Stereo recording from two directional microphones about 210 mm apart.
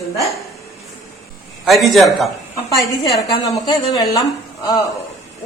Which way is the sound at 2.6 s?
15° left (ahead or behind).